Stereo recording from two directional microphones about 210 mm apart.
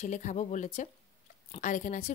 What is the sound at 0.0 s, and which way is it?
Speech, 35° left (ahead or behind).